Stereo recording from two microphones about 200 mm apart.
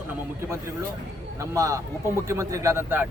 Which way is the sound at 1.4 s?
15° right (ahead or behind).